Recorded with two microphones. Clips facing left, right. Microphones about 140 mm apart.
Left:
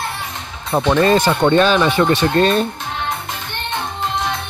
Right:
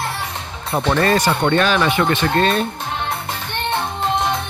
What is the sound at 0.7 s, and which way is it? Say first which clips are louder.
Speech: left 3 dB; 15° left (ahead or behind).